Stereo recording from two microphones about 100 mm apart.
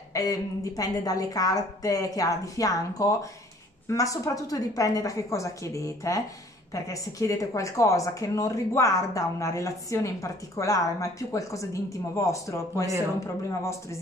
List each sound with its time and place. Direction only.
0.1 s speech: 35° left (ahead or behind)